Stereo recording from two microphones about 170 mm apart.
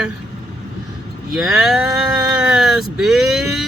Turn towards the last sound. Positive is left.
turn(degrees=0)  # may be behind; listen again after turning